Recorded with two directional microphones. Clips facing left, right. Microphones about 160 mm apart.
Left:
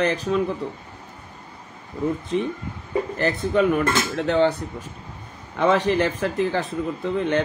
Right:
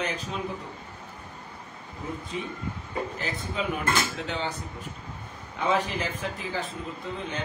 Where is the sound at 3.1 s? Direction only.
70° left (ahead or behind).